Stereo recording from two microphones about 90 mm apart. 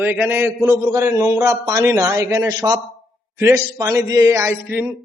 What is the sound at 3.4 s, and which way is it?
A man's voice, 30° right (ahead or behind).